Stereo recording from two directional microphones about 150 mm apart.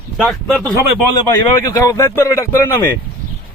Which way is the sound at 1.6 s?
20° left (ahead or behind).